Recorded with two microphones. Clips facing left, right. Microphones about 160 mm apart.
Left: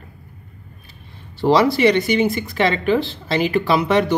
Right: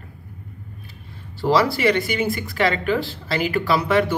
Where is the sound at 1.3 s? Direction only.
20° left (ahead or behind).